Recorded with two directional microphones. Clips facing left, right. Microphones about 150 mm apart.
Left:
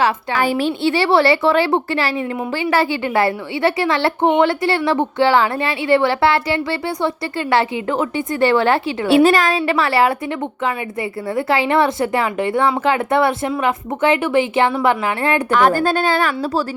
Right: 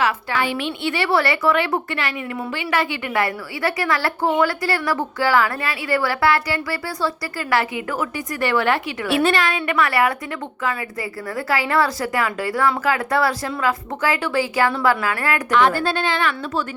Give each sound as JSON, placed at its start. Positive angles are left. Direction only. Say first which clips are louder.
{"t": 0.3, "sound": "a woman's voice", "louder": "left 5 dB", "side_deg": 40}
{"t": 11.3, "sound": "a woman's voice", "louder": "left 4 dB", "side_deg": 25}
{"t": 15.5, "sound": "a woman's voice", "louder": "left 2 dB", "side_deg": 45}